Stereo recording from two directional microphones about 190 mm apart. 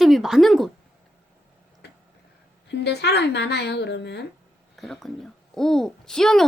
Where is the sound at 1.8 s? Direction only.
60° left (ahead or behind).